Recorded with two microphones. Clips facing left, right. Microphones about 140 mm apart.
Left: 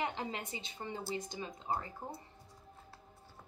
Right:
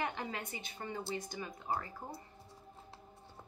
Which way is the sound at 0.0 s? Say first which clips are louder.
Left 1 dB; 25° left (ahead or behind).